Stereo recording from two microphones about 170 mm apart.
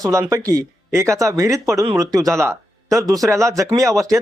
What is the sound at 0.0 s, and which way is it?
Speech, 20° right (ahead or behind).